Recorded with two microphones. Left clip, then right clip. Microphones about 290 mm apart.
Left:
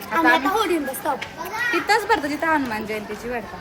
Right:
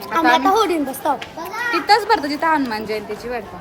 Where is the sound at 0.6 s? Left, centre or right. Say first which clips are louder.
Right 4 dB; centre.